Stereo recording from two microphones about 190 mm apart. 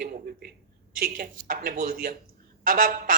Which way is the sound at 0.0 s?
50° right (ahead or behind).